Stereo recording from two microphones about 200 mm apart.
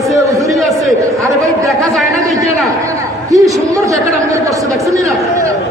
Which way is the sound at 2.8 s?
15° right (ahead or behind).